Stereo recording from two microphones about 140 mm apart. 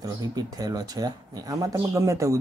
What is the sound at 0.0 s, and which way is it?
Speech, 30° right (ahead or behind).